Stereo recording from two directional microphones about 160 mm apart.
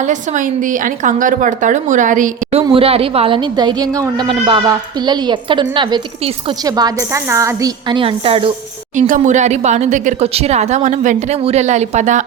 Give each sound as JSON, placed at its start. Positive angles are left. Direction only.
{"t": 0.0, "sound": "speech", "side_deg": -50}
{"t": 2.7, "sound": "a woman's voice", "side_deg": -35}
{"t": 9.0, "sound": "speech", "side_deg": -55}